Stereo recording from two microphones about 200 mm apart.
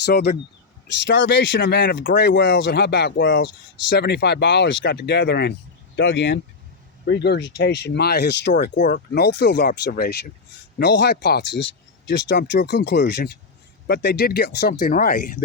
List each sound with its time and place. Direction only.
0.0 s speech: 55° left (ahead or behind)